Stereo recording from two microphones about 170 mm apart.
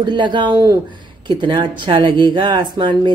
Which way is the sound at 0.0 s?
25° right (ahead or behind).